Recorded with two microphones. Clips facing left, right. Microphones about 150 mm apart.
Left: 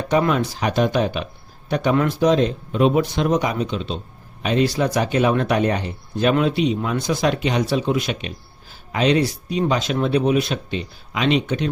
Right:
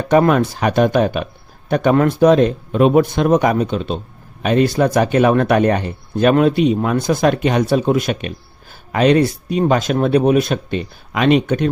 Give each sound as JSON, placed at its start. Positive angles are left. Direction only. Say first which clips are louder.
{"t": 0.1, "sound": "speech", "louder": "right 6 dB", "side_deg": -50}